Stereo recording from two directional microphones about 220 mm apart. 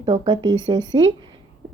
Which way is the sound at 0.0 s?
20° right (ahead or behind).